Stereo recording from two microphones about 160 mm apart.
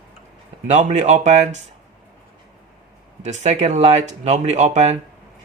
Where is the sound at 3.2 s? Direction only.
45° right (ahead or behind).